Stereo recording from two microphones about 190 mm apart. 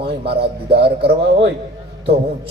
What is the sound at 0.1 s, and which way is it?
A man's voice, 60° right (ahead or behind).